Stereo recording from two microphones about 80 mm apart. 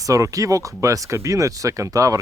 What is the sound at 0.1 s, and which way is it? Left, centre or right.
Speech, right.